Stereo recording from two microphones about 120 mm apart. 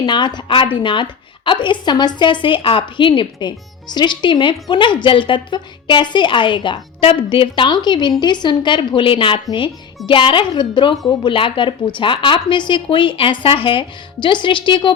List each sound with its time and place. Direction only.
0.0 s a woman's voice: 40° left (ahead or behind)